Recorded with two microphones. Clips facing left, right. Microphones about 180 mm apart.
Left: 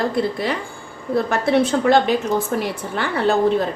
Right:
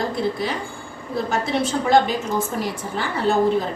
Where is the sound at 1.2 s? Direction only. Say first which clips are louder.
Left 4 dB; 60° left (ahead or behind).